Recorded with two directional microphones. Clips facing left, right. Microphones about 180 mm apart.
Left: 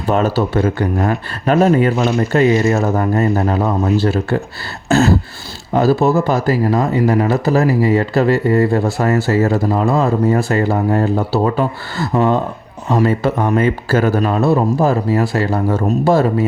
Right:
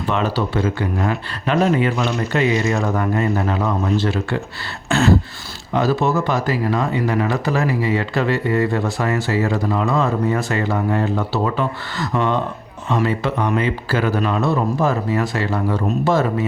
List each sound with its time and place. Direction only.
0.1 s speech: 40° left (ahead or behind)
4.9 s beatboxing: 35° left (ahead or behind)
5.7 s speech: 35° left (ahead or behind)